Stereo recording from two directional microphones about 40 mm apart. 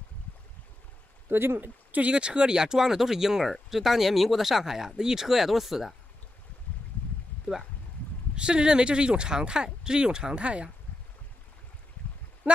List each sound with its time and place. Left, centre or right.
1.3 s speech: right
1.6 s speech: right
2.0 s speech: right; by 5.9 s centre
8.4 s speech: right